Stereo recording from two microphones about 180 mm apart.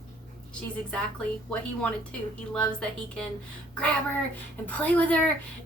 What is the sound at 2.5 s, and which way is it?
Speech, 5° left (ahead or behind).